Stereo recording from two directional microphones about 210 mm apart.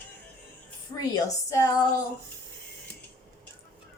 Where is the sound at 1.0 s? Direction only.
15° left (ahead or behind).